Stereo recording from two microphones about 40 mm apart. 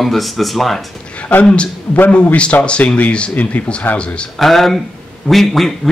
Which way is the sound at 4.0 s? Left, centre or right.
Left.